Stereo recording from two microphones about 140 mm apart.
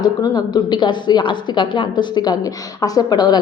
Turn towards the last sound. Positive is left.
turn(degrees=30)  # may be behind; listen again after turning